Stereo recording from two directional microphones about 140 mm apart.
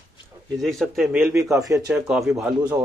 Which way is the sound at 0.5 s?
Centre (ahead or behind).